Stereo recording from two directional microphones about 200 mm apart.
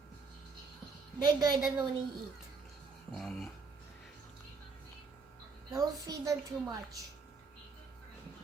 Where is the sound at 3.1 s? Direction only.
Centre (ahead or behind).